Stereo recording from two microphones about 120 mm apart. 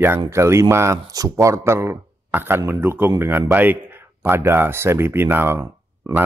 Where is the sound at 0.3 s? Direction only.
25° right (ahead or behind).